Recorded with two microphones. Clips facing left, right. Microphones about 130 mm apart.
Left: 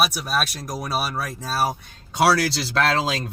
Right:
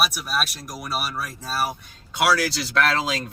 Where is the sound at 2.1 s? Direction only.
35° left (ahead or behind).